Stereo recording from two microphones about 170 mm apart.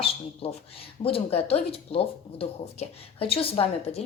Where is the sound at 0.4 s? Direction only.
35° left (ahead or behind).